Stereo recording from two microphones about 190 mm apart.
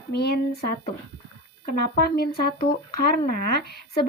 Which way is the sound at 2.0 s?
50° left (ahead or behind).